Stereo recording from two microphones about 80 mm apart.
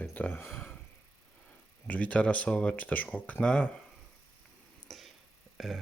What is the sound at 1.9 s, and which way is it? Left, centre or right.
Speech, centre.